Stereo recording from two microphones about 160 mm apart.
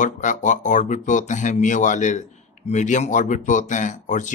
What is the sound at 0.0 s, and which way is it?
Speech, 50° left (ahead or behind).